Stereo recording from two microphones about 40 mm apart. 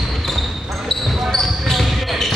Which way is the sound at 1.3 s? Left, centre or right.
Centre.